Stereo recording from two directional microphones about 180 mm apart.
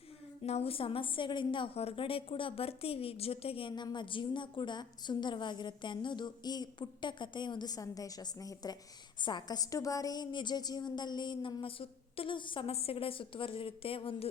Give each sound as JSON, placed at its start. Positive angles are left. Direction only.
{"t": 0.4, "sound": "a woman's voice", "side_deg": 35}